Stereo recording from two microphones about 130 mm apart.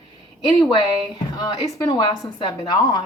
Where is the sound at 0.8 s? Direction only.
30° left (ahead or behind).